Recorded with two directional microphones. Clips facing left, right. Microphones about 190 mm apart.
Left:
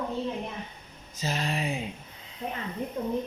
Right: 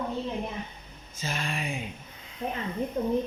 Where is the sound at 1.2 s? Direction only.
35° left (ahead or behind).